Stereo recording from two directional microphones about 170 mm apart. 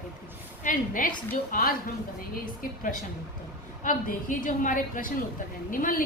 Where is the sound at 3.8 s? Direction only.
50° left (ahead or behind).